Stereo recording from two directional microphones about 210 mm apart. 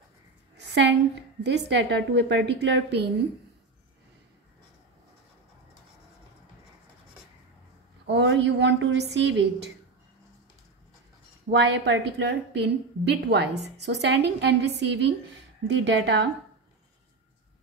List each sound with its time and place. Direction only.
0.6 s a sound: 55° right (ahead or behind)
1.4 s a woman's voice: 55° right (ahead or behind)
8.1 s a woman's voice: 55° right (ahead or behind)
11.5 s a woman's voice: 55° right (ahead or behind)